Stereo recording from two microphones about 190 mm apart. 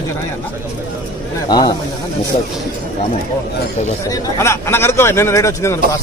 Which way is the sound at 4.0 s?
15° left (ahead or behind).